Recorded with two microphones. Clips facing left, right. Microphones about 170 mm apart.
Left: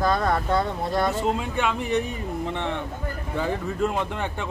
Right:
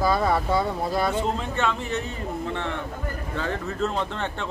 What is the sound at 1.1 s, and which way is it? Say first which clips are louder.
Speech: left 1 dB; 10° left (ahead or behind).